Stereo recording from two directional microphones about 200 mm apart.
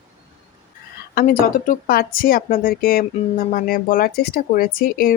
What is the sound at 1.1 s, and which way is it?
Speech, 45° left (ahead or behind).